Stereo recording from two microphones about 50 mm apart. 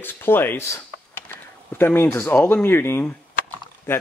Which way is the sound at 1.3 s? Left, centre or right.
Left.